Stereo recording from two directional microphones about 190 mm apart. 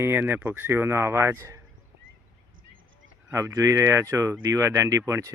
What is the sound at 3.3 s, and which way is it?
Speech, 15° right (ahead or behind).